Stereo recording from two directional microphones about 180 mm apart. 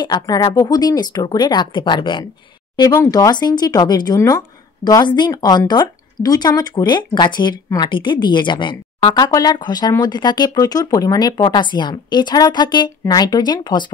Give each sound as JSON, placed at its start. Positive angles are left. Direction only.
{"t": 0.0, "sound": "speech", "side_deg": 20}